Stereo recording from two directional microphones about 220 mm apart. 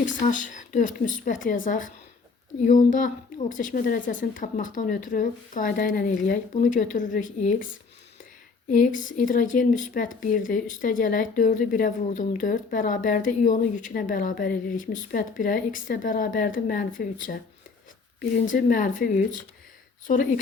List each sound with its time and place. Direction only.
0.0 s speech: 35° left (ahead or behind)
8.7 s speech: 35° left (ahead or behind)
18.5 s speech: 40° left (ahead or behind)